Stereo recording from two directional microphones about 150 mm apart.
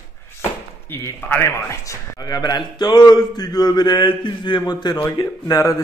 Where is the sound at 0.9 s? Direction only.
15° left (ahead or behind).